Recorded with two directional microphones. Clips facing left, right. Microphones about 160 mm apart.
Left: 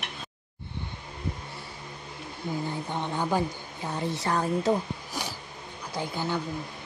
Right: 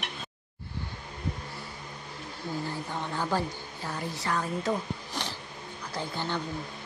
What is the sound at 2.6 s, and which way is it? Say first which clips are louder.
Speech: left 3 dB; 20° left (ahead or behind).